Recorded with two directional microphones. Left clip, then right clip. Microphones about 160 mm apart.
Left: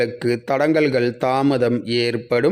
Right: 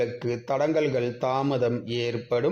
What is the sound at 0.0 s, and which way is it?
A man's voice, 45° left (ahead or behind).